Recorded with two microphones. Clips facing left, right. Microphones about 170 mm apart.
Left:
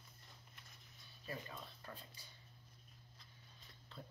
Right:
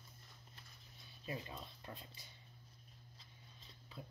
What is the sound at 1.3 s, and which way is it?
Speech, 20° right (ahead or behind).